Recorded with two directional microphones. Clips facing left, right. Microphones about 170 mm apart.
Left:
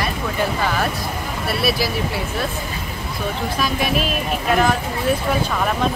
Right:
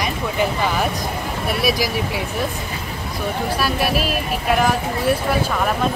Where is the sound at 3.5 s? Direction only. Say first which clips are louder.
Left 1 dB; 5° right (ahead or behind).